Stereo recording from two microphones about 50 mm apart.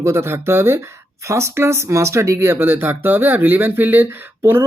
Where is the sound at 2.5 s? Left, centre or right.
Right.